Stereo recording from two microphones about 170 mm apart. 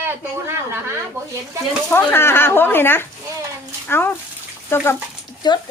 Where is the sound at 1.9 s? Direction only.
10° left (ahead or behind).